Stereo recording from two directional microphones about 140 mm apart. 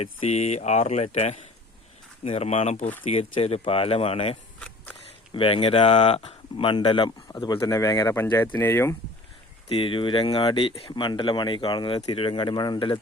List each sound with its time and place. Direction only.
0.0 s speech: 50° left (ahead or behind); by 9.0 s 15° left (ahead or behind)
9.6 s speech: 40° left (ahead or behind)